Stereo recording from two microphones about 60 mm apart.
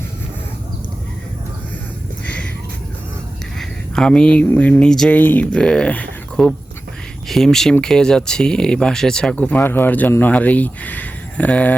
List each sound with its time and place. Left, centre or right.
2.2 s a sound: left
3.6 s a sound: centre
4.5 s speech: left
4.9 s speech: centre
5.1 s speech: left
5.5 s speech: centre
9.6 s speech: left